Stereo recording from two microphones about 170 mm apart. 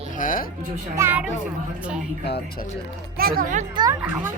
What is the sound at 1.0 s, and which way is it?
Speech, 10° right (ahead or behind).